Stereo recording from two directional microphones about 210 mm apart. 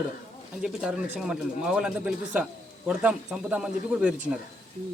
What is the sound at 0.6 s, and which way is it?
Speech, 5° right (ahead or behind).